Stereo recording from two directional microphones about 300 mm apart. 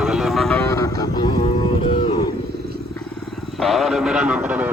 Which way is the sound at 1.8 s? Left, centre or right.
Centre.